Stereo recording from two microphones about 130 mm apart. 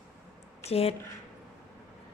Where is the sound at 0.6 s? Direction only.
50° left (ahead or behind).